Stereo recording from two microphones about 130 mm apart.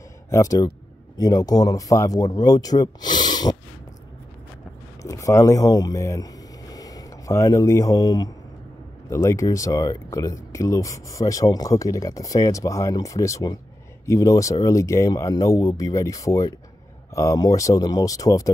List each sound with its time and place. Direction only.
0.3 s speech: 25° left (ahead or behind)
5.0 s speech: 25° left (ahead or behind)